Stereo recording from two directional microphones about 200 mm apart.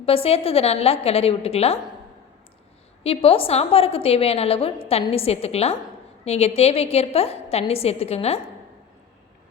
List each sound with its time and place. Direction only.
0.0 s a woman's voice: 30° left (ahead or behind)
3.0 s a woman's voice: 30° left (ahead or behind)